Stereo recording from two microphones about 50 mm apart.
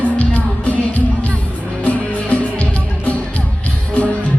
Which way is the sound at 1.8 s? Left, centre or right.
Left.